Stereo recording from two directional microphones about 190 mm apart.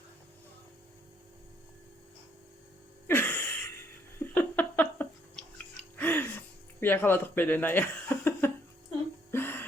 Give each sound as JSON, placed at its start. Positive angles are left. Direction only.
{"t": 3.1, "sound": "laughter", "side_deg": 10}
{"t": 6.0, "sound": "gasp", "side_deg": 10}
{"t": 9.3, "sound": "music", "side_deg": 10}